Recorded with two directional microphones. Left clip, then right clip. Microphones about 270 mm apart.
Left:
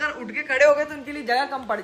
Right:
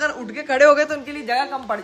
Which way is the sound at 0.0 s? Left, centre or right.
Centre.